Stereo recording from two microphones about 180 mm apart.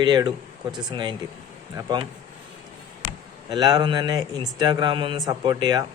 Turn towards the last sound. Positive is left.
turn(degrees=-20)  # may be behind; listen again after turning